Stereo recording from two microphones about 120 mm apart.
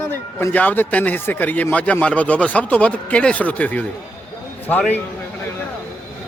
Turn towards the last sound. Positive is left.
turn(degrees=15)  # may be behind; listen again after turning